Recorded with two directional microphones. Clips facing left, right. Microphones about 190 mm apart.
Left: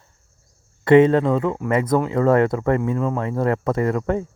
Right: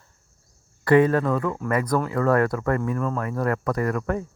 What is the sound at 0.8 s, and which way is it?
Speech, 25° left (ahead or behind).